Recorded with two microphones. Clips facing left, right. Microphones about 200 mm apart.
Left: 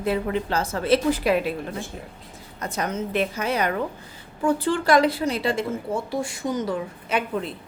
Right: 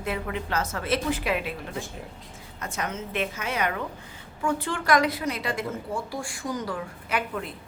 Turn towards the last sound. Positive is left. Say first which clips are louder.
# left 4 dB
turn(degrees=25)  # may be behind; listen again after turning